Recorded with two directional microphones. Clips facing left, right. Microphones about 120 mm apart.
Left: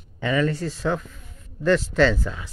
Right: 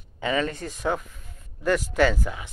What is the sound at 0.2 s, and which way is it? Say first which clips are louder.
Speech: left 3 dB; 20° right (ahead or behind).